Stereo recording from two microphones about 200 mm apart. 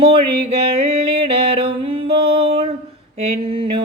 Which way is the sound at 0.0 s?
25° right (ahead or behind).